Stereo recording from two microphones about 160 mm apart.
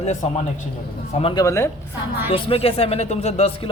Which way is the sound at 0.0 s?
45° left (ahead or behind).